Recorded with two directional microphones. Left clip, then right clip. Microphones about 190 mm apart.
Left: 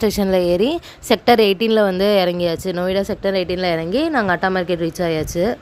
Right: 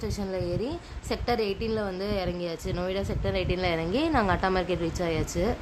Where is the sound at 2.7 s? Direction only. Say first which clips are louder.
Left 11 dB; 35° left (ahead or behind).